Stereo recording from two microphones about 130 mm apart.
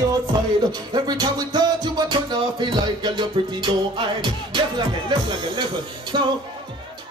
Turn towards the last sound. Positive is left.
turn(degrees=-35)  # may be behind; listen again after turning